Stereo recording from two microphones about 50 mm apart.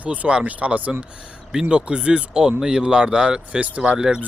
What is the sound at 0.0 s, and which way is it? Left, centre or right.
Speech, right.